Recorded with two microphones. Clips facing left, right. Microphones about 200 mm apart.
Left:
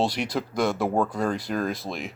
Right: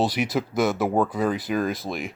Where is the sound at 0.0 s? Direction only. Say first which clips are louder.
Right 2 dB; 5° right (ahead or behind).